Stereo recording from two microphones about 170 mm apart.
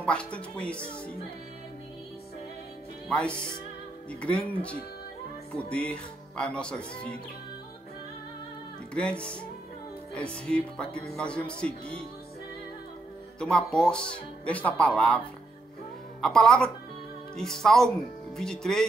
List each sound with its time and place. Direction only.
0.0 s speech: 5° left (ahead or behind)
3.1 s speech: 5° left (ahead or behind)
10.1 s speech: 5° left (ahead or behind)
13.4 s speech: 5° left (ahead or behind)
16.2 s speech: 5° left (ahead or behind)